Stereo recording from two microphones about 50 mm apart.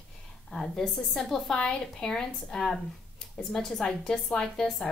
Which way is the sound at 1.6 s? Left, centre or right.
Centre.